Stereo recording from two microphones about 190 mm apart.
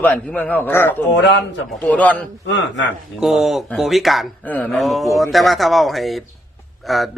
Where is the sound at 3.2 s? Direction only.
Centre (ahead or behind).